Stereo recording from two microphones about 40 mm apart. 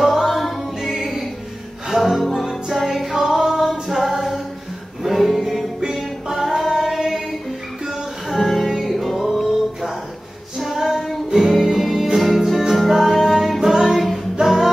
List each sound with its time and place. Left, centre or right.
0.0 s a capella: centre
2.0 s music: centre
8.3 s music: centre
10.6 s female singing: centre
11.2 s music: centre
13.9 s singing: centre
14.3 s music: centre